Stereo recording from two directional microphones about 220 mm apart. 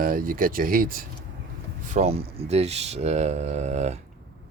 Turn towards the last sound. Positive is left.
turn(degrees=-30)  # may be behind; listen again after turning